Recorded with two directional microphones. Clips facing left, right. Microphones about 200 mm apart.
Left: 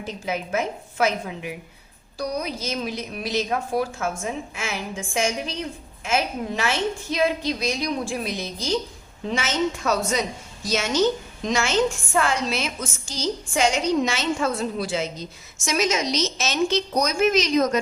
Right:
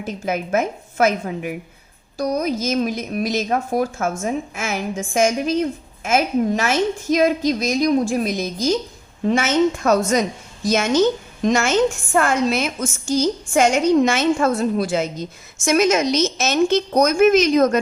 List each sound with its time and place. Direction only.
0.0 s a woman's voice: 50° right (ahead or behind)